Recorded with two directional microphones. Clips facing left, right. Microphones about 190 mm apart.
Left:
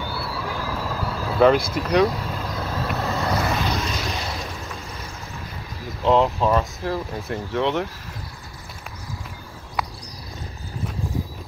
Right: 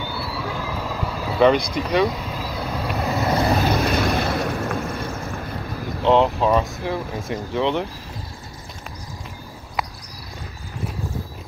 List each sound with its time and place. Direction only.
0.0 s vehicle: centre (ahead or behind); by 3.3 s 15° right (ahead or behind)
3.3 s vehicle: 30° right (ahead or behind)
3.7 s vehicle: 55° right (ahead or behind)
6.0 s speech: centre (ahead or behind)